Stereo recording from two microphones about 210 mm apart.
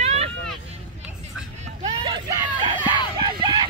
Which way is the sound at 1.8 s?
20° right (ahead or behind).